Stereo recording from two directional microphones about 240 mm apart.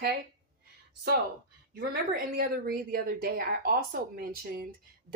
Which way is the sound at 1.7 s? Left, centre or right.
Right.